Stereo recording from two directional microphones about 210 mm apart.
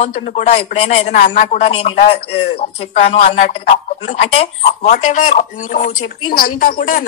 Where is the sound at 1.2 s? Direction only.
40° left (ahead or behind).